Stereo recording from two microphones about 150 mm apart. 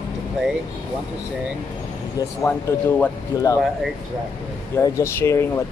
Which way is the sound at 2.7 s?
15° left (ahead or behind).